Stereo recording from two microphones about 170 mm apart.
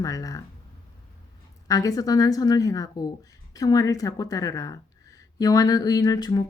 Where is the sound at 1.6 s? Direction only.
20° left (ahead or behind).